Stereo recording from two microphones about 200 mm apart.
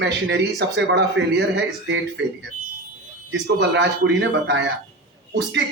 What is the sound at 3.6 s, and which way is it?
Speech, 60° right (ahead or behind).